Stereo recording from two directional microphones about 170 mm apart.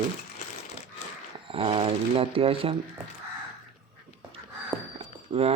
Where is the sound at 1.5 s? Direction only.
30° right (ahead or behind).